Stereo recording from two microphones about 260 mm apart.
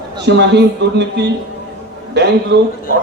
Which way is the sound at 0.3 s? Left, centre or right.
Right.